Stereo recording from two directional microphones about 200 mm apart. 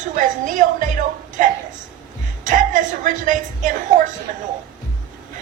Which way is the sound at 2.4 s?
40° right (ahead or behind).